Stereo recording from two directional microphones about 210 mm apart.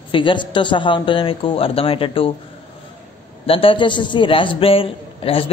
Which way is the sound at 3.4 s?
25° left (ahead or behind).